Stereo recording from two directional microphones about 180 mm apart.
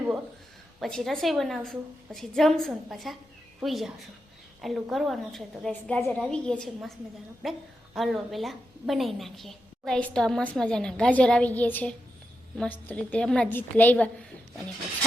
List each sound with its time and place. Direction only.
0.8 s a woman's voice: centre (ahead or behind)